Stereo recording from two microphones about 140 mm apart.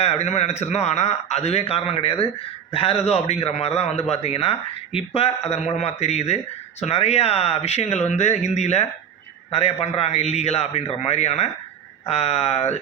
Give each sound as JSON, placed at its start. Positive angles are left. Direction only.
{"t": 0.0, "sound": "speech", "side_deg": 50}